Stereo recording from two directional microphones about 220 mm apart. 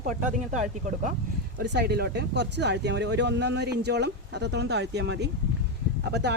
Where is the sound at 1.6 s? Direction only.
50° right (ahead or behind).